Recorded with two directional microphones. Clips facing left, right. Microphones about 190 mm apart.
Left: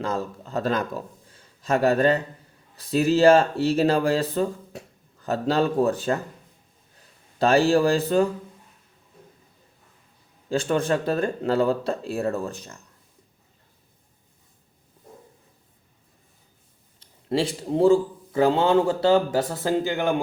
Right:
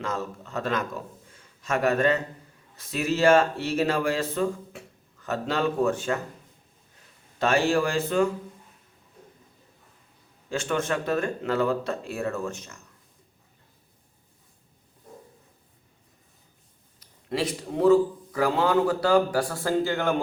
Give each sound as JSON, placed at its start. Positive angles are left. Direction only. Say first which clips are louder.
{"t": 0.0, "sound": "speech", "louder": "left 3 dB", "side_deg": 35}
{"t": 1.3, "sound": "a sound", "louder": "left 5 dB", "side_deg": 35}
{"t": 2.7, "sound": "speech", "louder": "left 7 dB", "side_deg": 35}
{"t": 7.3, "sound": "speech", "louder": "left 4 dB", "side_deg": 35}
{"t": 10.5, "sound": "speech", "louder": "left 4 dB", "side_deg": 35}
{"t": 17.0, "sound": "a man's voice", "louder": "left 4 dB", "side_deg": 30}